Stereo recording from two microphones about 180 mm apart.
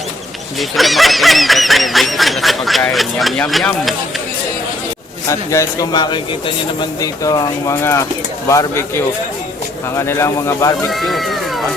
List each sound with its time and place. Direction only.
0.6 s speech: centre (ahead or behind)
5.3 s speech: 15° left (ahead or behind)
10.1 s speech: 15° left (ahead or behind)
11.0 s speech: centre (ahead or behind)